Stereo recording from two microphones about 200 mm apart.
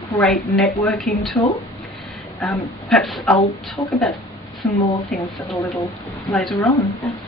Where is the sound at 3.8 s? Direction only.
20° left (ahead or behind).